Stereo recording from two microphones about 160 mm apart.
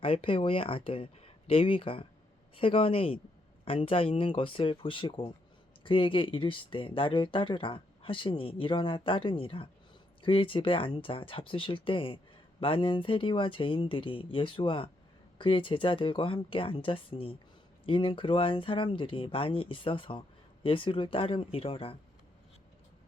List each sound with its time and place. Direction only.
0.0 s speech: 35° left (ahead or behind)